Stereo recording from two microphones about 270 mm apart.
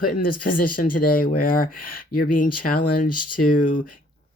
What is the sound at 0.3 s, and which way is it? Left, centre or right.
Speech, left.